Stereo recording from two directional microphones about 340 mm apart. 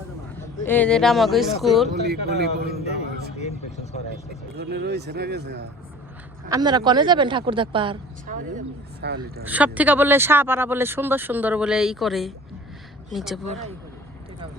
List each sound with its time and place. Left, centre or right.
0.3 s speech: centre
1.9 s speech: right
4.5 s speech: right
6.5 s a woman's voice: centre; by 9.4 s right
9.4 s speech: centre